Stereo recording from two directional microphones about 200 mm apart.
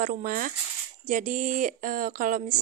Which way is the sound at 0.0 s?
40° right (ahead or behind).